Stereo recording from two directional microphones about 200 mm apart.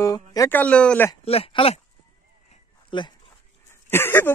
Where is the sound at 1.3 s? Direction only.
30° left (ahead or behind).